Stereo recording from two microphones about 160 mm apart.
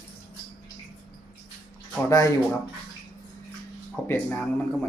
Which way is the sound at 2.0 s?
20° left (ahead or behind).